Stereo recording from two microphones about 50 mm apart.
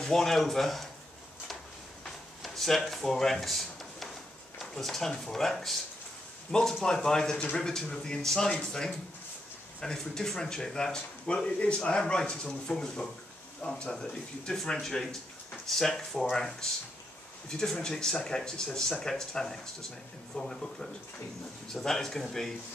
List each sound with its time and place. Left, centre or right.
0.0 s speech: centre
2.4 s speech: centre